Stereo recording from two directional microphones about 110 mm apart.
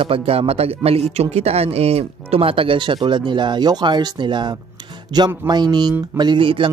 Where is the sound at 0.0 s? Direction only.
60° right (ahead or behind).